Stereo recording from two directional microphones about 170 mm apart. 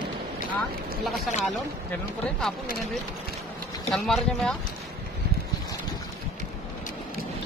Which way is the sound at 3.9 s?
Centre (ahead or behind).